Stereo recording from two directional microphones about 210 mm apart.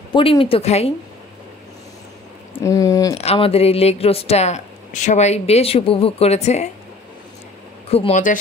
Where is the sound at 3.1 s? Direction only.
30° left (ahead or behind).